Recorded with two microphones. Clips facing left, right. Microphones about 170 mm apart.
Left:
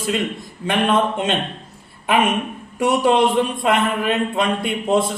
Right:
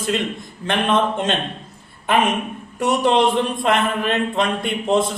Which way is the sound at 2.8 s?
5° left (ahead or behind).